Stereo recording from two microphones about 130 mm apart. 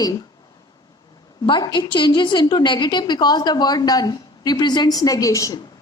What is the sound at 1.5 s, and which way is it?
A woman's voice, 35° left (ahead or behind).